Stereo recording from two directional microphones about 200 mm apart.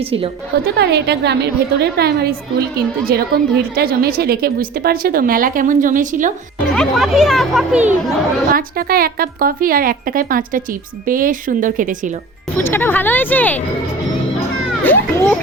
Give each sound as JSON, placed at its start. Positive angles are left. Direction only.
{"t": 0.6, "sound": "a woman's voice", "side_deg": -55}
{"t": 6.7, "sound": "speech", "side_deg": 0}
{"t": 8.5, "sound": "a woman's voice", "side_deg": -45}
{"t": 12.5, "sound": "speech", "side_deg": 10}
{"t": 14.8, "sound": "a child's voice", "side_deg": 10}